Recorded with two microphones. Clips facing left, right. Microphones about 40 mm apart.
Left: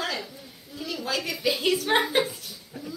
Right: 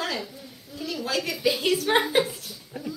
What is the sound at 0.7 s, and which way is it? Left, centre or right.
A woman's voice, centre.